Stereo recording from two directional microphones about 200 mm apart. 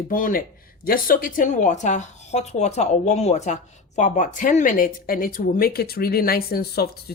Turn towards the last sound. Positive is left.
turn(degrees=50)  # may be behind; listen again after turning